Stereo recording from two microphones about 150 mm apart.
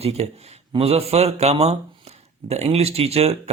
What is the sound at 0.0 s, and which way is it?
Speech, 45° right (ahead or behind).